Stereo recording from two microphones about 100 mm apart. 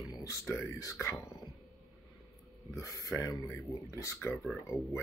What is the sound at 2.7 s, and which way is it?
Speech, 35° left (ahead or behind).